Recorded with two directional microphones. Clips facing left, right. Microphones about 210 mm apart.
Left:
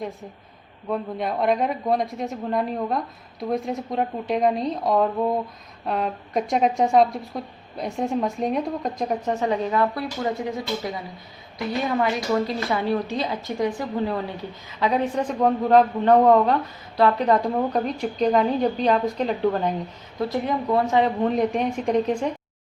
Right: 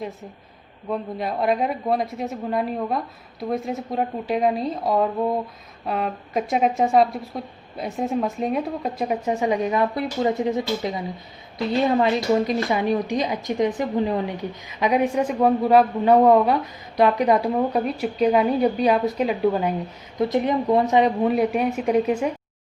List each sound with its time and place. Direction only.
0.9 s a woman's voice: centre (ahead or behind)
20.1 s a woman's voice: 20° right (ahead or behind)